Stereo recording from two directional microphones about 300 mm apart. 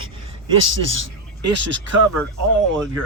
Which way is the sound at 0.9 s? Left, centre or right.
Right.